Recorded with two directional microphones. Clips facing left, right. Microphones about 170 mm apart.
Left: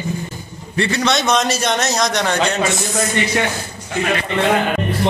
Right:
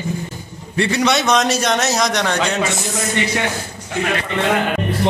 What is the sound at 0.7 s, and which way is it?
A man's voice, 10° right (ahead or behind).